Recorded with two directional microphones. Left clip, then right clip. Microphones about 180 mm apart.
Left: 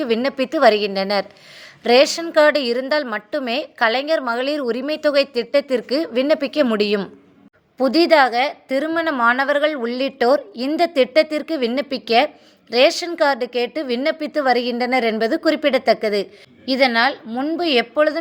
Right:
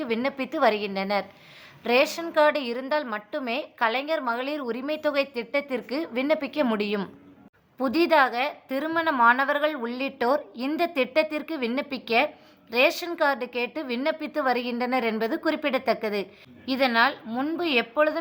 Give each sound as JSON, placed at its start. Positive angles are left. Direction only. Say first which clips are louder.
{"t": 0.0, "sound": "a woman's voice", "louder": "left 8 dB", "side_deg": 30}